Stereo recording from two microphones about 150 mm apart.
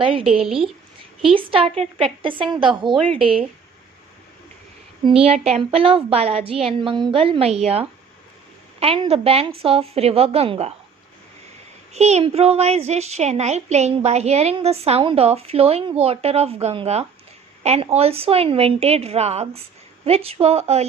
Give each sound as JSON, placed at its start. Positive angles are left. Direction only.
{"t": 0.0, "sound": "a woman's voice", "side_deg": -35}
{"t": 0.3, "sound": "a woman's voice", "side_deg": -5}
{"t": 1.2, "sound": "a woman's voice", "side_deg": -35}
{"t": 2.9, "sound": "a woman's voice", "side_deg": 5}
{"t": 3.2, "sound": "a woman's voice", "side_deg": -35}
{"t": 5.0, "sound": "a woman's voice", "side_deg": -40}
{"t": 11.9, "sound": "a child's voice", "side_deg": -45}